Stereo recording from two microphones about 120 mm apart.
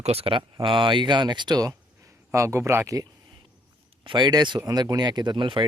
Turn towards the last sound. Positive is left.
turn(degrees=-40)  # may be behind; listen again after turning